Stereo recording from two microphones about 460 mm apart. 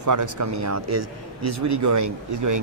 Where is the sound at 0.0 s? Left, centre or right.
Right.